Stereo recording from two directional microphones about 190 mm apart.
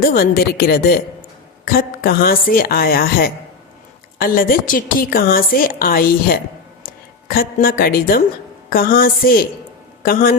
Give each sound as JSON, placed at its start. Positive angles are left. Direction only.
{"t": 0.0, "sound": "a woman's voice", "side_deg": 50}